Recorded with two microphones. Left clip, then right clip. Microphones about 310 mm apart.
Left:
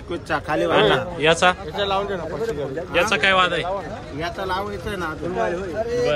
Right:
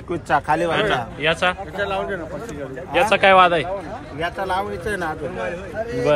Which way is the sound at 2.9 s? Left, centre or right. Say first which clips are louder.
Right 4 dB; centre.